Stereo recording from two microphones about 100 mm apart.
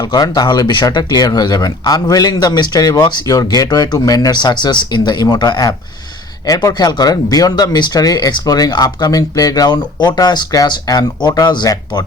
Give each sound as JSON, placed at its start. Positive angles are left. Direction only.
{"t": 0.1, "sound": "speech", "side_deg": 45}